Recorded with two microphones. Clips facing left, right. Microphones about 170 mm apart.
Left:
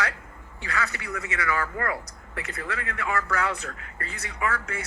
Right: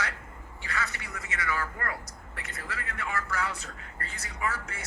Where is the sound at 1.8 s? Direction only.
90° left.